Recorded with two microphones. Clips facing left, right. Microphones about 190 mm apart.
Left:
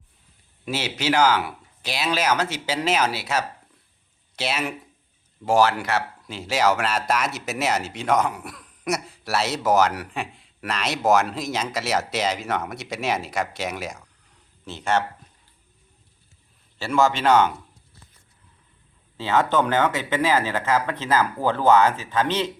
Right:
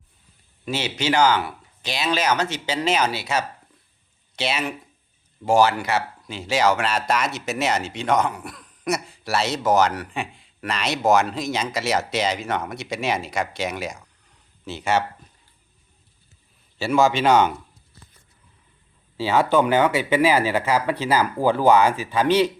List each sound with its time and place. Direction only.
0.6 s speech: 5° left (ahead or behind)
16.7 s speech: 10° right (ahead or behind)
19.1 s speech: 10° right (ahead or behind)